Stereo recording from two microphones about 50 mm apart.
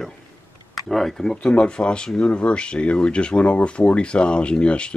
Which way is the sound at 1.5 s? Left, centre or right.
Left.